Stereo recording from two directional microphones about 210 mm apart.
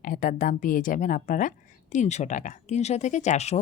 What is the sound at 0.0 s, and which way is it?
Speech, 40° left (ahead or behind).